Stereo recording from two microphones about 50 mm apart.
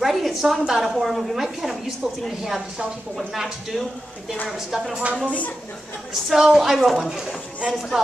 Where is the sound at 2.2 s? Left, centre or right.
Centre.